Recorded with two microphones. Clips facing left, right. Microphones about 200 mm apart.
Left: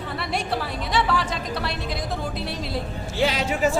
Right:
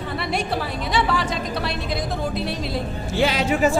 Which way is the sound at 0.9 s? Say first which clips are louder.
Right 1 dB; centre (ahead or behind).